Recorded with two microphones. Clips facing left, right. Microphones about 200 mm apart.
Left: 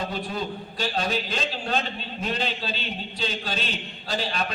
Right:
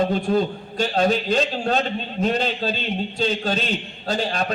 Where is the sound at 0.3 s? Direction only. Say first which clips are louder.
Right 10 dB; 45° right (ahead or behind).